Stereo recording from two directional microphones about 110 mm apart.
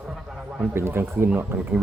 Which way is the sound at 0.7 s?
20° right (ahead or behind).